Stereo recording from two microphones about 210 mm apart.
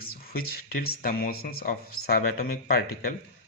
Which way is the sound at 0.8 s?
40° left (ahead or behind).